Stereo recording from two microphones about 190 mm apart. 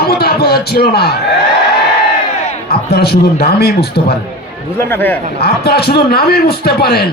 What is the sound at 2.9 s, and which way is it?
A man's voice, 55° left (ahead or behind).